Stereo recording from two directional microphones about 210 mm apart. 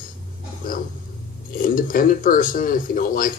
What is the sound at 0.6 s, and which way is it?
Speech, 40° left (ahead or behind).